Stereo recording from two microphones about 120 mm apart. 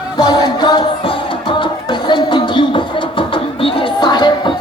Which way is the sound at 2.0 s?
40° left (ahead or behind).